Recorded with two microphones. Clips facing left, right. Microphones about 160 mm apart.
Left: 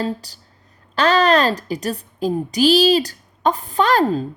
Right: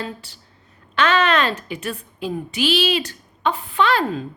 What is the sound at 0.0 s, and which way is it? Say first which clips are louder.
A woman's voice: left 7 dB; 40° left (ahead or behind).